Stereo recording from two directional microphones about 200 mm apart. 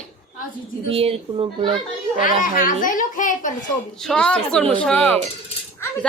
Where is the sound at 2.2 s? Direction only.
40° left (ahead or behind).